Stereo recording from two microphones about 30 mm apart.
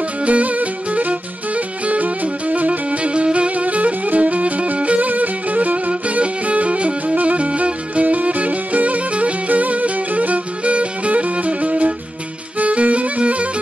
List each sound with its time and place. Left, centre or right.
0.2 s music: right
3.0 s music: right